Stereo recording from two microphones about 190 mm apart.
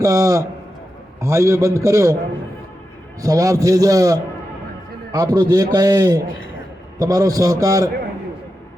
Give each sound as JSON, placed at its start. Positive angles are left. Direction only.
{"t": 0.0, "sound": "a man's voice", "side_deg": -15}
{"t": 3.2, "sound": "a man's voice", "side_deg": -20}
{"t": 6.2, "sound": "a man's voice", "side_deg": 90}
{"t": 7.0, "sound": "a man's voice", "side_deg": -20}